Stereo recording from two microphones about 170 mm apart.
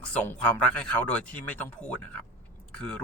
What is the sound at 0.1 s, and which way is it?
Speech, 10° left (ahead or behind).